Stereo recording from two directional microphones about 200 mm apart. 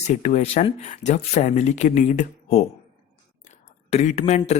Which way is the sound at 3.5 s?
35° left (ahead or behind).